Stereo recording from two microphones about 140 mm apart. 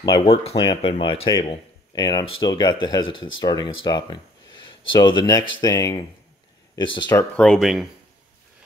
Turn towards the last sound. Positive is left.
turn(degrees=0)  # may be behind; listen again after turning